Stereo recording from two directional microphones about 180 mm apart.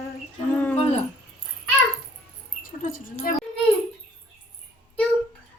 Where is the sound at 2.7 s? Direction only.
50° left (ahead or behind).